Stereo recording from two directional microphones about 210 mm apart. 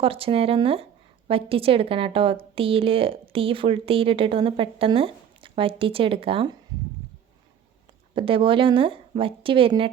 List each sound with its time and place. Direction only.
0.0 s a woman's voice: 25° right (ahead or behind)
8.1 s a woman's voice: 25° right (ahead or behind)